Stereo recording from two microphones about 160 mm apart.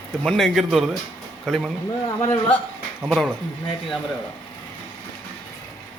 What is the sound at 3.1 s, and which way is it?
Speech, centre (ahead or behind).